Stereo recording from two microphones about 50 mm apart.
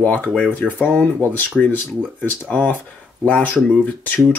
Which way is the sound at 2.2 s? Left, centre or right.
Left.